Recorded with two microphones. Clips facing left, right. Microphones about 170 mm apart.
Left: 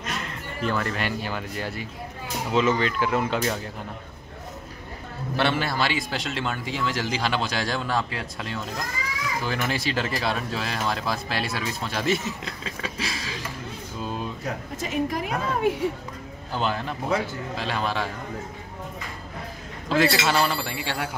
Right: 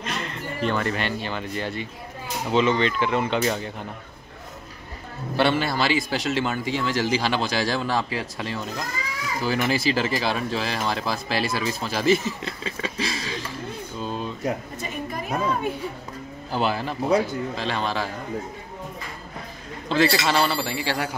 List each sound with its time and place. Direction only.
0.0 s a man's voice: centre (ahead or behind)
5.3 s a man's voice: centre (ahead or behind)
13.9 s a sound: 5° left (ahead or behind)
14.8 s a woman's voice: 90° left
16.5 s a man's voice: 5° right (ahead or behind)
19.9 s a man's voice: centre (ahead or behind)